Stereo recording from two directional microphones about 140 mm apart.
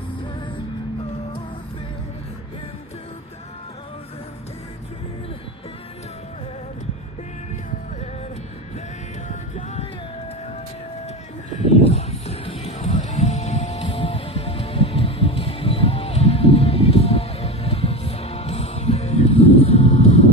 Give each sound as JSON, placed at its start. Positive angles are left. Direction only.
{"t": 9.3, "sound": "music", "side_deg": 60}
{"t": 11.5, "sound": "music", "side_deg": 50}